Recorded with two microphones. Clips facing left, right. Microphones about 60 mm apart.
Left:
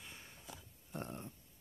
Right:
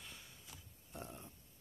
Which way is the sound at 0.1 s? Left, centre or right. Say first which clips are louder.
Left 2 dB; left.